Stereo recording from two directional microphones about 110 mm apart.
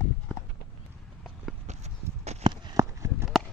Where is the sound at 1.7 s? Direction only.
90° right.